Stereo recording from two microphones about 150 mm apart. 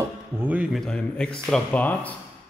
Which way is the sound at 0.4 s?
10° right (ahead or behind).